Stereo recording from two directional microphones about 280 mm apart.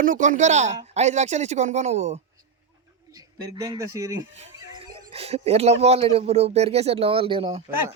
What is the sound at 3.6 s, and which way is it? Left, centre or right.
Speech, centre.